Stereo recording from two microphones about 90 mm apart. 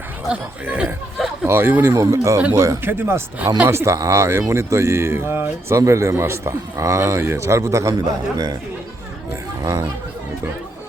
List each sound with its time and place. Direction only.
0.6 s speech: 20° right (ahead or behind); by 2.7 s 40° right (ahead or behind)
2.8 s speech: 25° right (ahead or behind); by 8.5 s 45° right (ahead or behind)
9.6 s speech: 40° right (ahead or behind)